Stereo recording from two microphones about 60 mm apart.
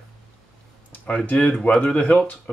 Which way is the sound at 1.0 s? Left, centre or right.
Left.